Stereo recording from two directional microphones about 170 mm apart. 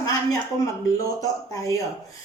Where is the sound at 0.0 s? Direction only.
20° left (ahead or behind).